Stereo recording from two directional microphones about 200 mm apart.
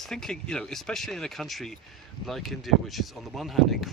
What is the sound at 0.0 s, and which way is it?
Speech, centre (ahead or behind).